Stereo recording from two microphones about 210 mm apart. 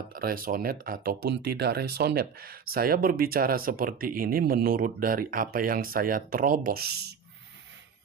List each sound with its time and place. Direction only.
0.1 s speech: 45° right (ahead or behind)